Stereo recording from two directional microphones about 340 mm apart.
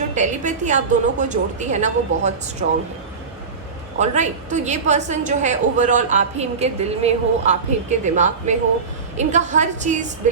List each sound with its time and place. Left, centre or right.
0.1 s a woman's voice: right
3.9 s a woman's voice: right